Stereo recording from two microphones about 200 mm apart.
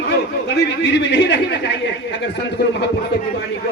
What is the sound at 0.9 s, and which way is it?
Speech, 60° left (ahead or behind).